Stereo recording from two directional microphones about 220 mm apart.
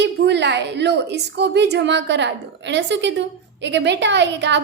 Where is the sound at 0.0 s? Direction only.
50° right (ahead or behind).